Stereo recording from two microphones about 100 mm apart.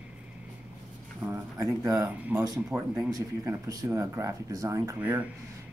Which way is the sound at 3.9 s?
30° right (ahead or behind).